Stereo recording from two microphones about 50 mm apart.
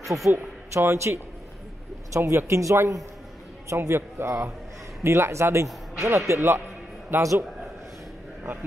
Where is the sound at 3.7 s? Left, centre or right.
Right.